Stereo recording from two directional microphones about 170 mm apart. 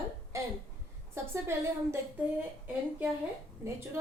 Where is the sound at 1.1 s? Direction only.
15° right (ahead or behind).